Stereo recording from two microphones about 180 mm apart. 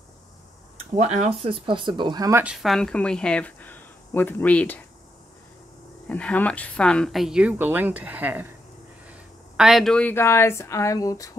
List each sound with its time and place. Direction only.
0.9 s speech: 40° right (ahead or behind); by 2.4 s 20° right (ahead or behind)
2.4 s speech: centre (ahead or behind)
6.0 s speech: 5° left (ahead or behind)